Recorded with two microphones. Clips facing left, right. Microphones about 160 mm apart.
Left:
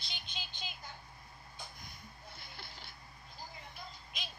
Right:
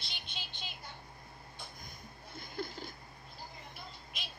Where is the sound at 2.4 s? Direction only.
45° right (ahead or behind).